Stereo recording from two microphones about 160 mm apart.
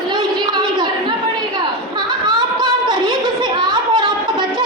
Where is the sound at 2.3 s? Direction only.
25° right (ahead or behind).